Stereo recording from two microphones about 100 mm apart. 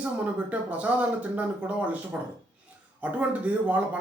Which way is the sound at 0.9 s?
15° right (ahead or behind).